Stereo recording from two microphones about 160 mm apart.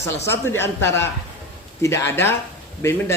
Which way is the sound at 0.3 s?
15° left (ahead or behind).